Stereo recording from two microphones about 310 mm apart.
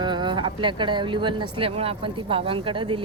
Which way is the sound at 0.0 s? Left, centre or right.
Centre.